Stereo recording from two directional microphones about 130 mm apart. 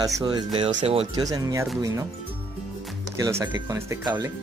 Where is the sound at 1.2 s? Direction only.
25° right (ahead or behind).